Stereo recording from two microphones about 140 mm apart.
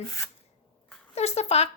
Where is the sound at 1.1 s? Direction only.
50° left (ahead or behind).